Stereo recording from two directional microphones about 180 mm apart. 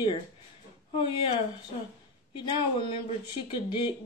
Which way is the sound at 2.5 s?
30° left (ahead or behind).